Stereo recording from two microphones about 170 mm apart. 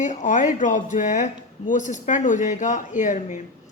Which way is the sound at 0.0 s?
45° left (ahead or behind).